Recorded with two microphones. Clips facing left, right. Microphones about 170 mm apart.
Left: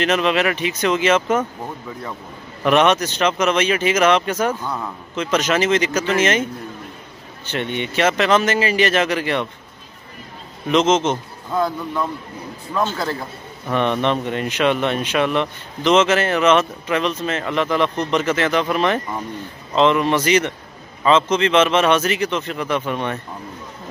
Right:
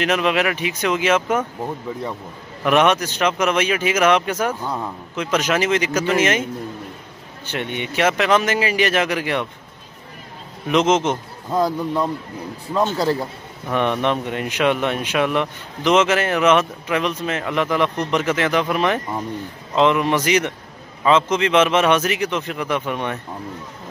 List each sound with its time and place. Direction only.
0.0 s speech: 10° right (ahead or behind)
2.6 s speech: 10° right (ahead or behind)
7.4 s speech: 10° right (ahead or behind)
10.7 s speech: 15° right (ahead or behind)
11.5 s a man's voice: 35° right (ahead or behind)
13.7 s speech: 10° right (ahead or behind)